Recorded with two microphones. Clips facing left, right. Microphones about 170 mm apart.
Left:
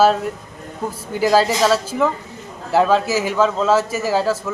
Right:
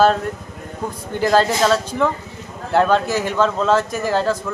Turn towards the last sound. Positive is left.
turn(degrees=5)  # may be behind; listen again after turning